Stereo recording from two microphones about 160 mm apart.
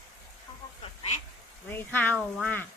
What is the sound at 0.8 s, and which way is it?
Duck, 45° left (ahead or behind).